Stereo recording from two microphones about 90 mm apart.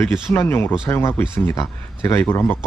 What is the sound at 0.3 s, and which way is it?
Speech, 25° left (ahead or behind).